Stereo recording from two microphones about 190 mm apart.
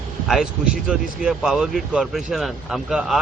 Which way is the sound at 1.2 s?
5° right (ahead or behind).